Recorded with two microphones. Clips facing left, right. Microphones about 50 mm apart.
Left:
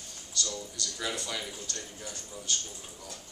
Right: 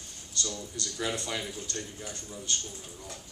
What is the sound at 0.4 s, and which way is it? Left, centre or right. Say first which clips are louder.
A man's voice: even; right.